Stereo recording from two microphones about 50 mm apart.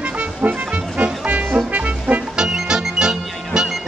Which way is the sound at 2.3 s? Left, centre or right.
Centre.